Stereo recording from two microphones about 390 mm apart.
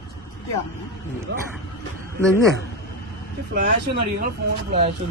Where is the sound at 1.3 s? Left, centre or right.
Right.